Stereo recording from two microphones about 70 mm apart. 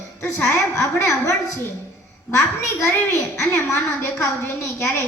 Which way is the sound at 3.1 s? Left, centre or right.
Left.